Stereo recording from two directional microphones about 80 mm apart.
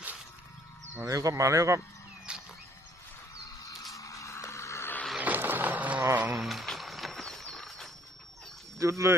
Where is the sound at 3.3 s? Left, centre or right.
Left.